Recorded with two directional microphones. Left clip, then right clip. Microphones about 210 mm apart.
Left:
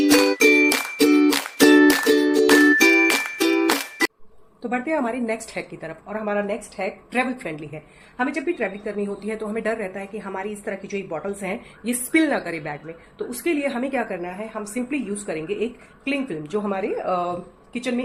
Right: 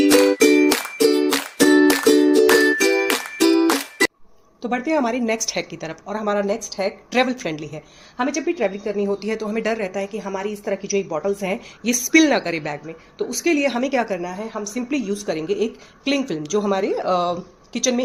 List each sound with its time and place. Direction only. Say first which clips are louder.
0.0 s music: right 2 dB; 5° right (ahead or behind)
4.6 s a woman's voice: right 3 dB; 45° right (ahead or behind)